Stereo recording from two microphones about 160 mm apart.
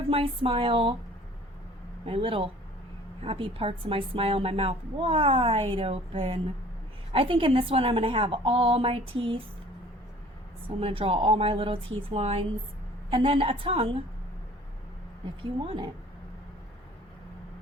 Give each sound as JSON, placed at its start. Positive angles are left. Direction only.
{"t": 0.1, "sound": "a woman's voice", "side_deg": -35}
{"t": 2.0, "sound": "a woman's voice", "side_deg": -35}
{"t": 10.8, "sound": "a woman's voice", "side_deg": -35}
{"t": 15.4, "sound": "a woman's voice", "side_deg": -30}